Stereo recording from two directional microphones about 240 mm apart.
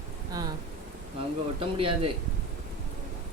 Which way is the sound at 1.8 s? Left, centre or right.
Right.